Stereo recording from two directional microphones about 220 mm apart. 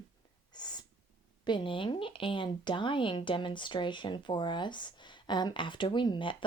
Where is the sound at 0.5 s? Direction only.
20° left (ahead or behind).